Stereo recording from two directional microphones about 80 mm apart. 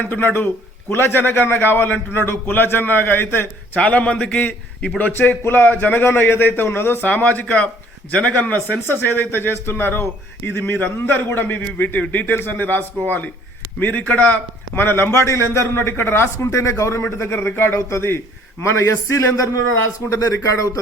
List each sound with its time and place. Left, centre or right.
0.0 s a man's voice: left
3.8 s a man's voice: centre
14.8 s a man's voice: left